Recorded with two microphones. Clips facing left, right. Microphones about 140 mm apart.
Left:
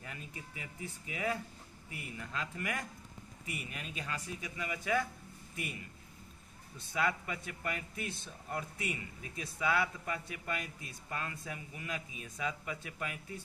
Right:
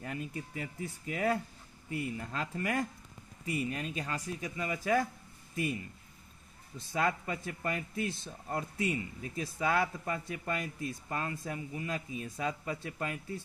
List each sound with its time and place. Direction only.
0.0 s speech: 40° right (ahead or behind)
1.9 s speech: 30° right (ahead or behind)
6.9 s speech: 40° right (ahead or behind)